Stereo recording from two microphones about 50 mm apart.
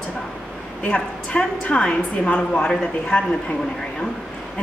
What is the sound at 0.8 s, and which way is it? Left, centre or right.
A woman's voice, left.